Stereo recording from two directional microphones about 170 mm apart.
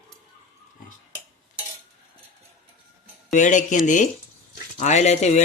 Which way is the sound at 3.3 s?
45° left (ahead or behind).